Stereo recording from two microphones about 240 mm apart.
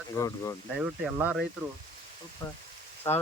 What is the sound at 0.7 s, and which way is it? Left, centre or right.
Speech, centre.